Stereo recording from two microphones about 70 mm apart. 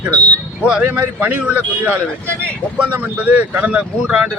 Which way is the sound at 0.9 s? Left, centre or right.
Right.